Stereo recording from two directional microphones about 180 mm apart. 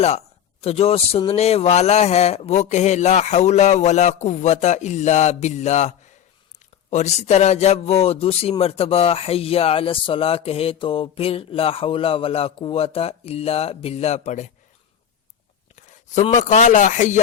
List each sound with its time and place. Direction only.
0.6 s a man's voice: 35° left (ahead or behind)
6.9 s a man's voice: 40° left (ahead or behind)
15.7 s speech: 40° left (ahead or behind)